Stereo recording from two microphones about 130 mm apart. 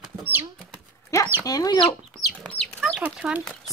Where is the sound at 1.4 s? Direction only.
30° left (ahead or behind).